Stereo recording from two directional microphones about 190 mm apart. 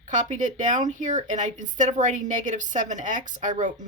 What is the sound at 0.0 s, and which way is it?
Speech, 40° right (ahead or behind).